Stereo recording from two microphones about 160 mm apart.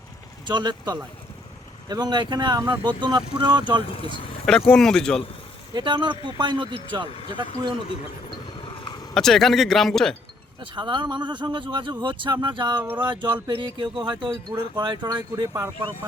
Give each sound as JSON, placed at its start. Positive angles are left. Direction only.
{"t": 0.4, "sound": "speech", "side_deg": -25}
{"t": 3.9, "sound": "speech", "side_deg": 35}
{"t": 4.7, "sound": "speech", "side_deg": 5}
{"t": 5.7, "sound": "speech", "side_deg": -30}
{"t": 8.6, "sound": "vehicle", "side_deg": 30}
{"t": 9.1, "sound": "speech", "side_deg": 0}
{"t": 10.8, "sound": "speech", "side_deg": -30}